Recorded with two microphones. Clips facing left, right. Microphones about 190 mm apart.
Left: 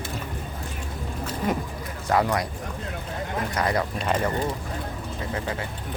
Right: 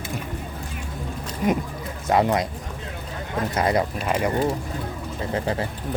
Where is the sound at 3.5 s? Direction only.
25° right (ahead or behind).